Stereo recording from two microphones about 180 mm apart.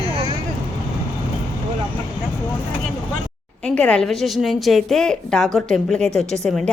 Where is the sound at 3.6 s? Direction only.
5° left (ahead or behind).